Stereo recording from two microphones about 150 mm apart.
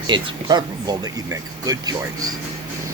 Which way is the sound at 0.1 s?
30° right (ahead or behind).